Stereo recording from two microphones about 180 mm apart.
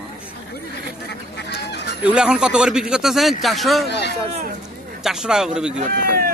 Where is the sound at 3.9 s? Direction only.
70° left (ahead or behind).